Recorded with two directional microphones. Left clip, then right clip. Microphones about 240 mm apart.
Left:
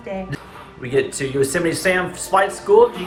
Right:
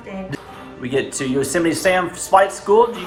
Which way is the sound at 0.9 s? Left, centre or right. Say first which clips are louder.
Left 1 dB; right.